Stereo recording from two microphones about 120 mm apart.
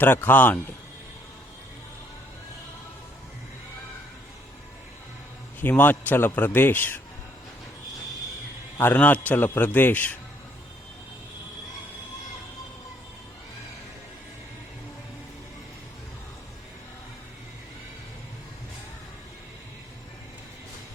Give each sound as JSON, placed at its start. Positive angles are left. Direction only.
{"t": 0.0, "sound": "a man's voice", "side_deg": 15}
{"t": 5.5, "sound": "a man's voice", "side_deg": 15}
{"t": 8.8, "sound": "a man's voice", "side_deg": 15}